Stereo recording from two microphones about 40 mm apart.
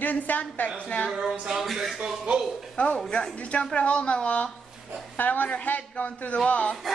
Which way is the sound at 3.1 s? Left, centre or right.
Left.